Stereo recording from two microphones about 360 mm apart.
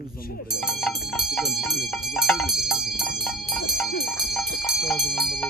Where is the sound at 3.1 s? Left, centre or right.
Centre.